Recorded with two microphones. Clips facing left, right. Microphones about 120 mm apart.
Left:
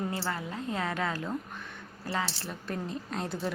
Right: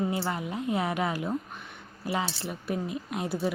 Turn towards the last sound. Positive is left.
turn(degrees=-5)  # may be behind; listen again after turning